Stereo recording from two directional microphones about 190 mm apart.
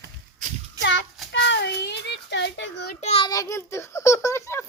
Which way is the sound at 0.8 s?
75° left (ahead or behind).